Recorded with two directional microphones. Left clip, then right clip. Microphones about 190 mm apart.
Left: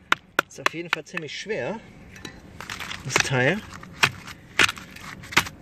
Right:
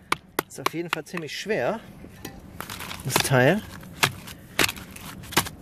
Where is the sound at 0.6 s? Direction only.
10° right (ahead or behind).